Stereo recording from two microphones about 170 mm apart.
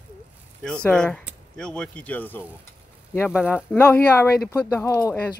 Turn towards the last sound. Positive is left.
turn(degrees=15)  # may be behind; listen again after turning